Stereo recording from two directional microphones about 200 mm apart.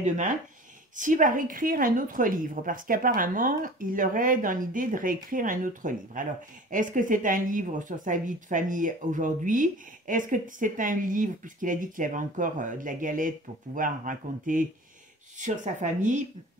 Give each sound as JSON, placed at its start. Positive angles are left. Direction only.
{"t": 0.0, "sound": "a woman's voice", "side_deg": -40}